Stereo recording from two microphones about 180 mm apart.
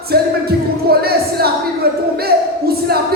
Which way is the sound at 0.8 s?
60° right (ahead or behind).